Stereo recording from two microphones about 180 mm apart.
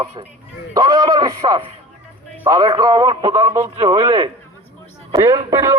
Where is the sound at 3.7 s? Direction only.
25° right (ahead or behind).